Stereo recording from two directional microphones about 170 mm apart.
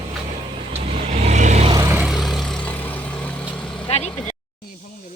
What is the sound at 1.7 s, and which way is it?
Vehicle, 20° right (ahead or behind).